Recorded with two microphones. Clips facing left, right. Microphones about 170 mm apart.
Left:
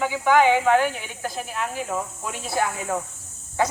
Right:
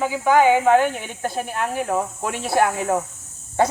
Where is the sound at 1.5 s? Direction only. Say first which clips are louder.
Right 5 dB; 60° right (ahead or behind).